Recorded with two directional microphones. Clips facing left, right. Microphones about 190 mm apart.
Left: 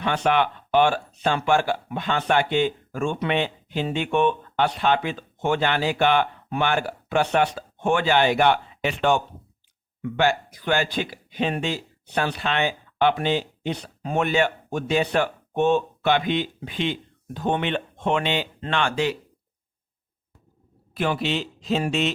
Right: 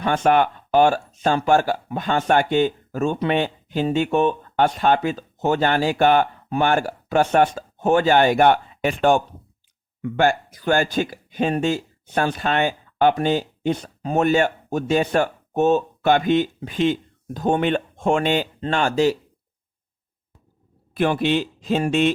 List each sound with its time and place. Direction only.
0.0 s speech: 45° right (ahead or behind)
21.0 s speech: 50° right (ahead or behind)